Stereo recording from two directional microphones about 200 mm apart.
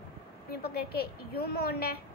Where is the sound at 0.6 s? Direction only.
50° left (ahead or behind).